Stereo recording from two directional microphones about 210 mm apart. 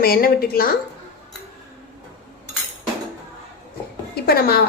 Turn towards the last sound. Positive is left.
turn(degrees=50)  # may be behind; listen again after turning